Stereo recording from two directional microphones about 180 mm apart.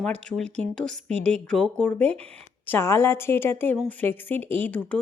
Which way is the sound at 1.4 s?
5° left (ahead or behind).